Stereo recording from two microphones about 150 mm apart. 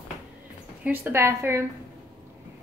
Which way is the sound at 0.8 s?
10° right (ahead or behind).